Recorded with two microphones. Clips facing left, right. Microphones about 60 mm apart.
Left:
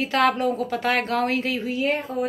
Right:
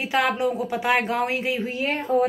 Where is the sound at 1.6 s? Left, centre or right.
Right.